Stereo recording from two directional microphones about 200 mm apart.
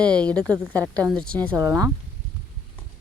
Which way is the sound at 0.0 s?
5° left (ahead or behind).